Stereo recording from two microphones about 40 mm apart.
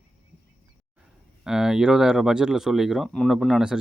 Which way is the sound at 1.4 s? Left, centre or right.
Centre.